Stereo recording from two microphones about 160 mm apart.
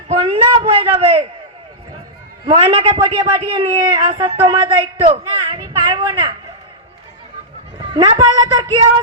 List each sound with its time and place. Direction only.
0.1 s a sound: 35° right (ahead or behind)
2.5 s a man's voice: 30° right (ahead or behind)
7.8 s speech: 30° right (ahead or behind)